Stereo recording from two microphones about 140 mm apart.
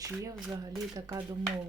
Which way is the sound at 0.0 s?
25° right (ahead or behind).